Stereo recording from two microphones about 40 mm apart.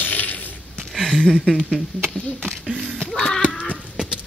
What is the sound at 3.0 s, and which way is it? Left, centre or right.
Music, centre.